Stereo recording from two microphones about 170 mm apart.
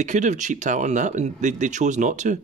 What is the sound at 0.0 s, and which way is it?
Speech, 45° right (ahead or behind).